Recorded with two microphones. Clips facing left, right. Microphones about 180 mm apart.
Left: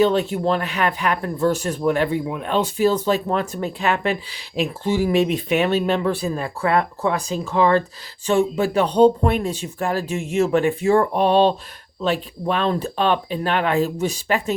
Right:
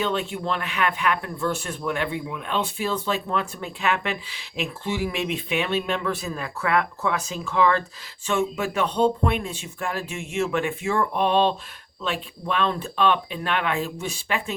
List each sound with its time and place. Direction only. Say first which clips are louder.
0.0 s speech: left 8 dB; 40° left (ahead or behind)